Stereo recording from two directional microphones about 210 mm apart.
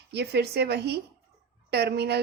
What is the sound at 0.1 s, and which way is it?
A woman's voice, 50° right (ahead or behind).